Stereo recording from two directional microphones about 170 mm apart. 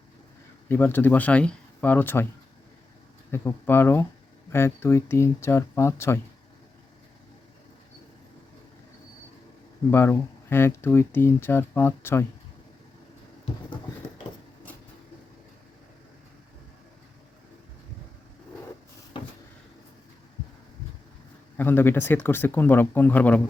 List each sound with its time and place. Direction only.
0.7 s speech: 15° left (ahead or behind)
3.3 s speech: 15° left (ahead or behind)
9.9 s speech: 15° left (ahead or behind)
19.1 s vehicle: 30° left (ahead or behind)
21.6 s speech: 10° left (ahead or behind)